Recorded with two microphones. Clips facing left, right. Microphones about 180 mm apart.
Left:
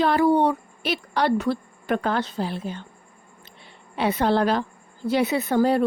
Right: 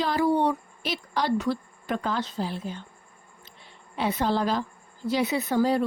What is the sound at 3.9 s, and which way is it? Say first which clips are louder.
A woman's voice: left 4 dB; 70° left (ahead or behind).